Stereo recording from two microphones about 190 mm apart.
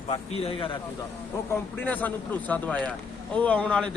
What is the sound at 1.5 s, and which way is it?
A man's voice, 10° left (ahead or behind).